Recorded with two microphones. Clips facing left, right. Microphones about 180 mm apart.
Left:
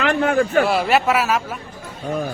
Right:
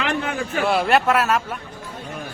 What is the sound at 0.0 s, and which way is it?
Speech, 50° left (ahead or behind).